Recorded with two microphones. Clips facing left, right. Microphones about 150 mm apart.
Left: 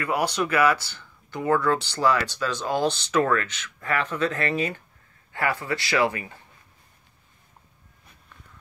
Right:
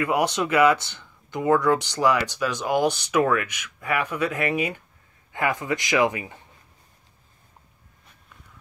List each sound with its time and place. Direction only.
0.0 s speech: 20° right (ahead or behind)